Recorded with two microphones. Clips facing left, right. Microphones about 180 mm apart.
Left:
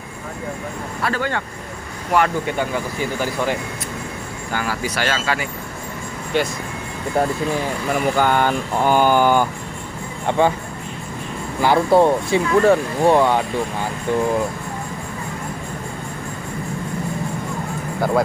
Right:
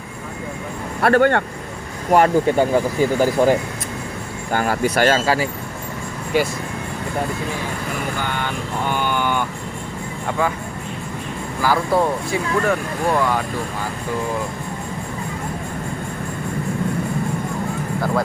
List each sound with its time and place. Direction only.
1.0 s speech: 60° right (ahead or behind)
2.1 s speech: 40° right (ahead or behind)
6.3 s speech: 5° right (ahead or behind)
8.2 s vehicle: 45° left (ahead or behind)
10.2 s speech: 30° left (ahead or behind)
11.6 s speech: 25° left (ahead or behind)